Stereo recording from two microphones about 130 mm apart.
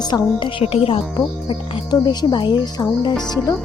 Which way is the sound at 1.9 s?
30° left (ahead or behind).